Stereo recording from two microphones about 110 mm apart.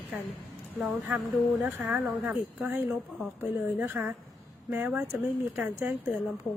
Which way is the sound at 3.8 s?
15° right (ahead or behind).